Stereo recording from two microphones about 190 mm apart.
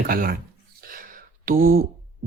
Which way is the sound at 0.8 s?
50° right (ahead or behind).